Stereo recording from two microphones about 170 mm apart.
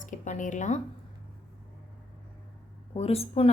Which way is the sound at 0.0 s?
45° left (ahead or behind).